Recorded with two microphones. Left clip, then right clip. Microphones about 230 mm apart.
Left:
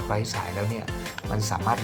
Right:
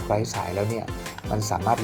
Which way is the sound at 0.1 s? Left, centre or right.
Left.